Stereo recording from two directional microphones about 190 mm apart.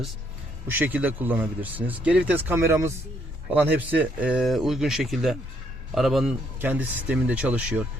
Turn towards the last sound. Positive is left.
turn(degrees=-5)  # may be behind; listen again after turning